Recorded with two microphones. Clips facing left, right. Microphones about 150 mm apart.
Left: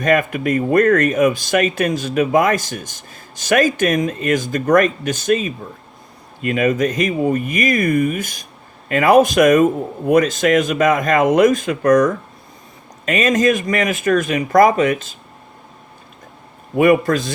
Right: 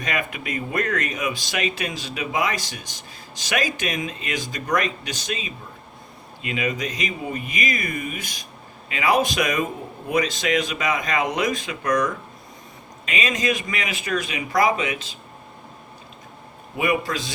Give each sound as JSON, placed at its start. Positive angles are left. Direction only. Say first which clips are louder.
{"t": 0.0, "sound": "speech", "louder": "left 11 dB", "side_deg": 50}
{"t": 16.7, "sound": "speech", "louder": "left 10 dB", "side_deg": 50}